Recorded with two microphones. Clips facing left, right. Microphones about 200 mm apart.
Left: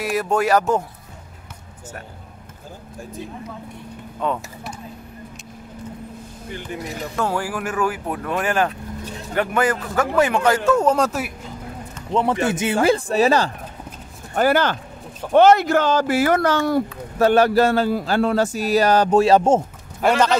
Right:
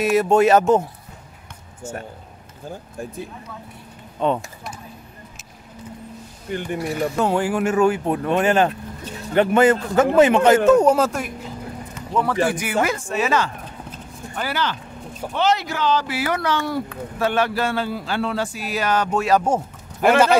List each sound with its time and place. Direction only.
0.0 s speech: 25° right (ahead or behind)
4.2 s speech: 25° right (ahead or behind)
6.5 s speech: 55° right (ahead or behind)
7.2 s speech: 20° right (ahead or behind)
11.0 s speech: 5° left (ahead or behind)
12.1 s speech: 25° left (ahead or behind)
12.8 s speech: 35° left (ahead or behind)
14.3 s speech: 50° left (ahead or behind); by 19.6 s 25° left (ahead or behind)